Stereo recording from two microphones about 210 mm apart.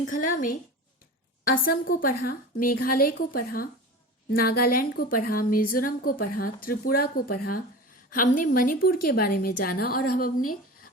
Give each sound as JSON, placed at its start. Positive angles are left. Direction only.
{"t": 0.0, "sound": "a woman's voice", "side_deg": 40}
{"t": 1.5, "sound": "a woman's voice", "side_deg": 40}